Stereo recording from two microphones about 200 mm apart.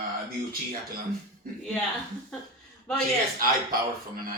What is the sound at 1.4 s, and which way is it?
Speech, 45° right (ahead or behind).